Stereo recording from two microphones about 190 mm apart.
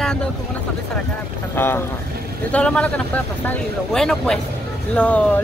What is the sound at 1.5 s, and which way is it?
Speech, 10° left (ahead or behind).